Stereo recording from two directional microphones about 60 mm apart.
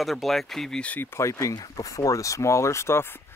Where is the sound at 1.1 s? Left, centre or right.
Left.